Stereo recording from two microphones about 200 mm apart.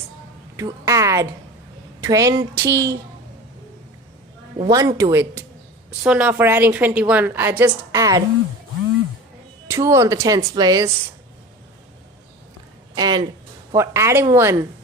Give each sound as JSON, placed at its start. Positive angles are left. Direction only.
{"t": 0.5, "sound": "a woman's voice", "side_deg": -15}
{"t": 4.7, "sound": "a woman's voice", "side_deg": -15}
{"t": 9.6, "sound": "a woman's voice", "side_deg": -15}
{"t": 12.9, "sound": "a sound", "side_deg": -20}
{"t": 13.7, "sound": "a woman's voice", "side_deg": -15}